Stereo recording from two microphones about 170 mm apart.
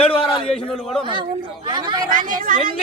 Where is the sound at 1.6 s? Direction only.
25° right (ahead or behind).